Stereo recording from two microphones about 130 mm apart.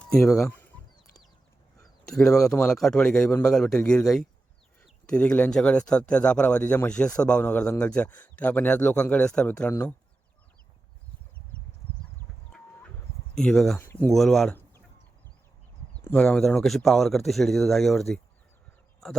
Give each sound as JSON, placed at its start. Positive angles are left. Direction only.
{"t": 0.0, "sound": "chicken", "side_deg": 5}
{"t": 2.0, "sound": "speech", "side_deg": 5}
{"t": 12.5, "sound": "chicken", "side_deg": 5}
{"t": 13.3, "sound": "speech", "side_deg": 5}
{"t": 13.7, "sound": "speech", "side_deg": 15}
{"t": 14.1, "sound": "speech", "side_deg": 0}
{"t": 16.0, "sound": "speech", "side_deg": 10}